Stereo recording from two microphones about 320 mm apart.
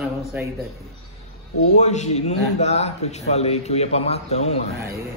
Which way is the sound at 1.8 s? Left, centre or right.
Left.